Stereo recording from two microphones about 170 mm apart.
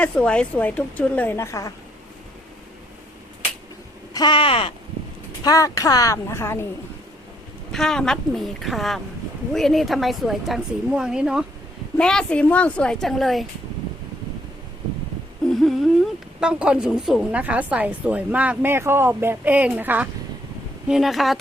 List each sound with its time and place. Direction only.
0.0 s a woman's voice: 5° left (ahead or behind)
4.1 s a woman's voice: 25° left (ahead or behind)
7.7 s a woman's voice: 5° left (ahead or behind)
15.4 s a sound: centre (ahead or behind)
16.4 s a woman's voice: 5° right (ahead or behind)